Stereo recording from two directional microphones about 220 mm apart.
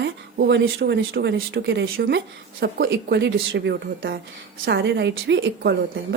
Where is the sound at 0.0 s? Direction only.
50° right (ahead or behind).